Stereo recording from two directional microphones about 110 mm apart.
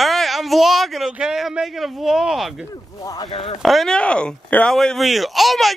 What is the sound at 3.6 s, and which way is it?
Speech, centre (ahead or behind).